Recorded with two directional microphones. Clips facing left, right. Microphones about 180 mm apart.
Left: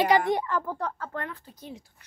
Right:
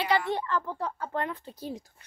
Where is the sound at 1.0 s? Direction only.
20° right (ahead or behind).